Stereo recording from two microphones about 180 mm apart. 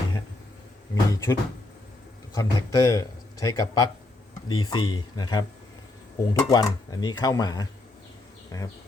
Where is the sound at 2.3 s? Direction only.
20° left (ahead or behind).